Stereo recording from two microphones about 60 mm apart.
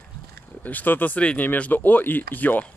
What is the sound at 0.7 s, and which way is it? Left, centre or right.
Speech, left.